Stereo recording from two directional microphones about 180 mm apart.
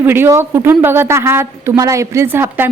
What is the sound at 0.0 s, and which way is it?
Speech, 10° right (ahead or behind).